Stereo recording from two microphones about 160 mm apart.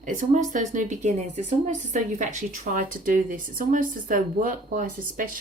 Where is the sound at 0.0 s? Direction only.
50° right (ahead or behind).